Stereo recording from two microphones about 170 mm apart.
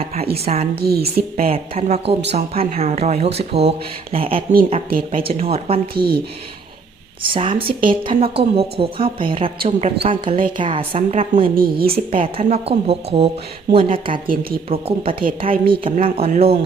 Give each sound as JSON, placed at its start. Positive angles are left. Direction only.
{"t": 0.4, "sound": "a woman's voice", "side_deg": -35}
{"t": 0.8, "sound": "a woman's voice", "side_deg": -65}
{"t": 1.5, "sound": "a woman's voice", "side_deg": -35}
{"t": 4.9, "sound": "speech", "side_deg": -55}
{"t": 5.2, "sound": "a woman's voice", "side_deg": -35}
{"t": 5.9, "sound": "speech", "side_deg": -65}
{"t": 7.2, "sound": "a woman's voice", "side_deg": -30}
{"t": 11.5, "sound": "speech", "side_deg": -60}
{"t": 11.9, "sound": "a woman's voice", "side_deg": -35}